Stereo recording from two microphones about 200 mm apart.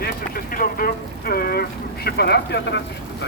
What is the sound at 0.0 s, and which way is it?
Vehicle, 45° left (ahead or behind).